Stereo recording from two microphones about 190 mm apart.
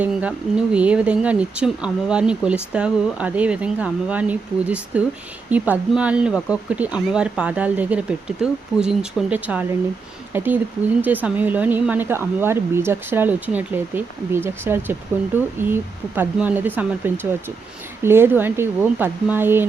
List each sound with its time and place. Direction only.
0.0 s speech: 5° right (ahead or behind)